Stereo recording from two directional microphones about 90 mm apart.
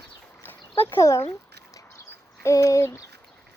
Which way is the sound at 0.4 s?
20° left (ahead or behind).